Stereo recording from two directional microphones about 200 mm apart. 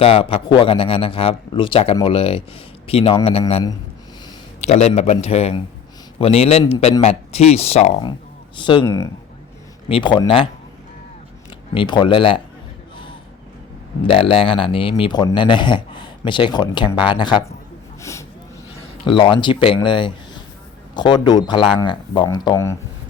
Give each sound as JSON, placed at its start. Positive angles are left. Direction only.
{"t": 0.0, "sound": "speech", "side_deg": 30}
{"t": 4.6, "sound": "speech", "side_deg": 35}
{"t": 11.7, "sound": "speech", "side_deg": 25}
{"t": 14.0, "sound": "speech", "side_deg": 30}
{"t": 18.0, "sound": "a sound", "side_deg": 15}
{"t": 19.0, "sound": "speech", "side_deg": 25}